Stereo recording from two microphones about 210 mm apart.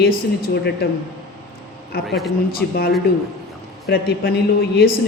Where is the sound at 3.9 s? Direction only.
50° left (ahead or behind).